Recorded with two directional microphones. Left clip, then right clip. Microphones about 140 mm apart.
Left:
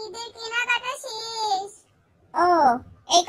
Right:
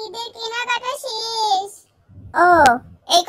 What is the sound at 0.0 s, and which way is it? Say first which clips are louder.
Child singing: right 6 dB; 30° right (ahead or behind).